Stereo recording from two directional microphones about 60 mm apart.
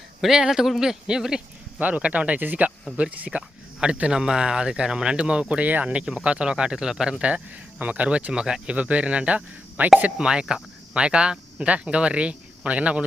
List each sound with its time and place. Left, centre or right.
0.2 s speech: centre
1.8 s speech: right